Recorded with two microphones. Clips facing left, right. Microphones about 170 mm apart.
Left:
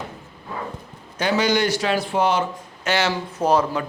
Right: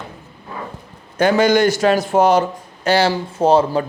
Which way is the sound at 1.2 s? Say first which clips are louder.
Right 7 dB; 50° right (ahead or behind).